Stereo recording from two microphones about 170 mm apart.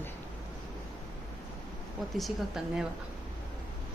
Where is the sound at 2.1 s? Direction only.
Centre (ahead or behind).